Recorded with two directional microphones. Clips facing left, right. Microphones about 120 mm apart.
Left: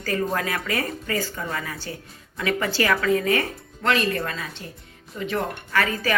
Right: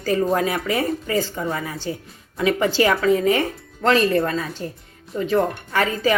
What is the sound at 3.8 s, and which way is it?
Speech, 35° right (ahead or behind).